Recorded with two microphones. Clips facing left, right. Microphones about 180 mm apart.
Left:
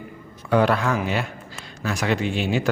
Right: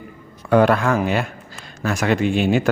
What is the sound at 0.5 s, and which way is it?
Speech, 50° right (ahead or behind).